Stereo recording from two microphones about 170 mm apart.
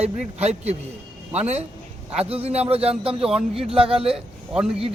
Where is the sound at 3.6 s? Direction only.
35° right (ahead or behind).